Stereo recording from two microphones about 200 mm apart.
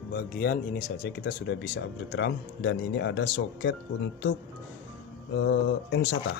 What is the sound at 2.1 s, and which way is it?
Speech, 65° left (ahead or behind).